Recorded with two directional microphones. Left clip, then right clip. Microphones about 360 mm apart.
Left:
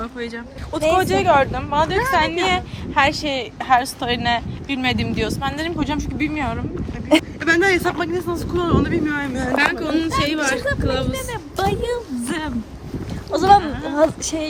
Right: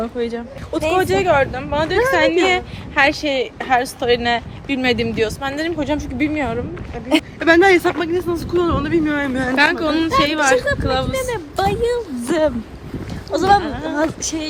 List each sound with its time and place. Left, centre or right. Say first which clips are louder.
0.0 s a woman's voice: right 6 dB; centre
7.1 s speech: left 1 dB; left
7.4 s a woman's voice: right 4 dB; centre
11.2 s speech: right 4 dB; centre
13.3 s speech: left 1 dB; left